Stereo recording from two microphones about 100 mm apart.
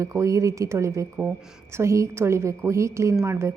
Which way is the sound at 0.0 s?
30° right (ahead or behind).